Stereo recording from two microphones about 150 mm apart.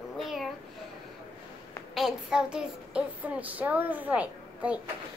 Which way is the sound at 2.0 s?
5° right (ahead or behind).